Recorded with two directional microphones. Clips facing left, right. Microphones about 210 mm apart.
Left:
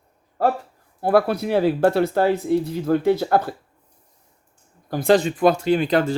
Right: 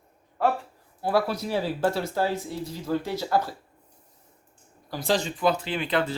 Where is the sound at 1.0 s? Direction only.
55° left (ahead or behind).